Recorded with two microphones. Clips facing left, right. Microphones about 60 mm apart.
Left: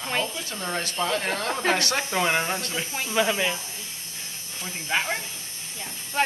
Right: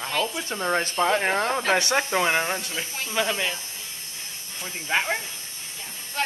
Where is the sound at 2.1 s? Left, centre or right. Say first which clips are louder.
Left 1 dB; centre.